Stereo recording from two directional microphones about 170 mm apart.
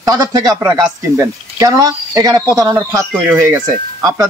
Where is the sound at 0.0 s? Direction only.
20° right (ahead or behind).